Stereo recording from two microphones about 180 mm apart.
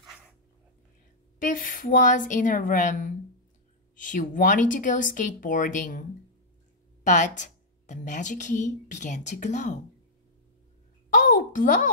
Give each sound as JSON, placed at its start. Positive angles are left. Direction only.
{"t": 1.4, "sound": "a woman's voice", "side_deg": 45}
{"t": 7.0, "sound": "a woman's voice", "side_deg": 45}
{"t": 11.1, "sound": "a sound", "side_deg": 45}